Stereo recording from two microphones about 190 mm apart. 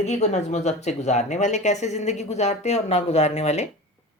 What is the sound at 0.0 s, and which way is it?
Speech, 35° left (ahead or behind).